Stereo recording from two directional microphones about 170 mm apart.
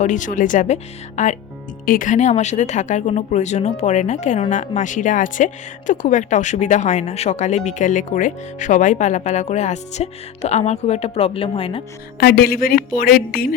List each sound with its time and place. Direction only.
0.0 s speech: 45° left (ahead or behind)
1.8 s speech: 55° left (ahead or behind); by 11.8 s 30° left (ahead or behind)
12.2 s speech: 70° left (ahead or behind)